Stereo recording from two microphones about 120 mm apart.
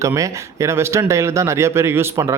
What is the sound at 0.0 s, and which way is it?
Speech, 25° right (ahead or behind).